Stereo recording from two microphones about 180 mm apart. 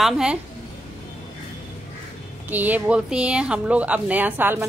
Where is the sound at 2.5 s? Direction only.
10° right (ahead or behind).